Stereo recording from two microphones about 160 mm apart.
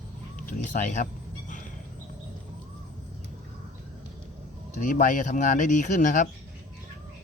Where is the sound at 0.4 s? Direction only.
55° left (ahead or behind).